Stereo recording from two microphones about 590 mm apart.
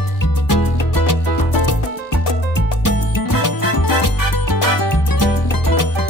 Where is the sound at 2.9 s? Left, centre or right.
Left.